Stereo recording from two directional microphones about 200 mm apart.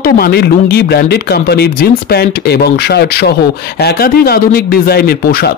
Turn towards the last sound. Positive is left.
turn(degrees=50)  # may be behind; listen again after turning